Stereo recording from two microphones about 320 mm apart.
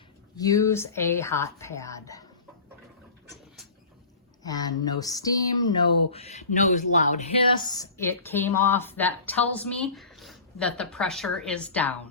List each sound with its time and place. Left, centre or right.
0.3 s speech: centre
4.4 s speech: centre